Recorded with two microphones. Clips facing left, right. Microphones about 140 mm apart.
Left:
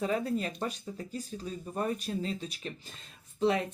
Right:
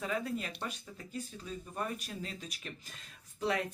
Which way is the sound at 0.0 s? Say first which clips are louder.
Left 6 dB; 35° left (ahead or behind).